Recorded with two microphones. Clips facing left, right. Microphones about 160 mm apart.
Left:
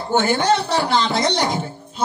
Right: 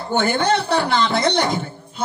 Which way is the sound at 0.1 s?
55° right (ahead or behind).